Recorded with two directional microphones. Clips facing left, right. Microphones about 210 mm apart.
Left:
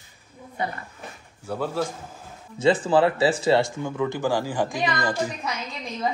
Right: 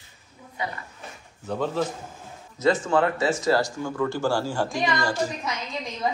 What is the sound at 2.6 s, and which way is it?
Speech, 30° left (ahead or behind).